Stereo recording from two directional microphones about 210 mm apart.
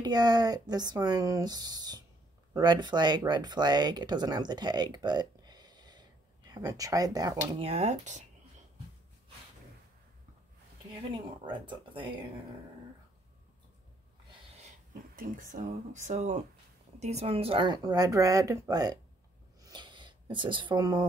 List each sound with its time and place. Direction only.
0.0 s speech: 20° right (ahead or behind)
7.6 s speech: 30° right (ahead or behind)
11.4 s speech: 20° right (ahead or behind)
15.1 s speech: 40° right (ahead or behind); by 18.9 s 20° right (ahead or behind)
19.6 s a sound: 20° right (ahead or behind)